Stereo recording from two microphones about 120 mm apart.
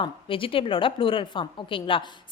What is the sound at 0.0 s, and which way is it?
A woman's voice, 45° left (ahead or behind).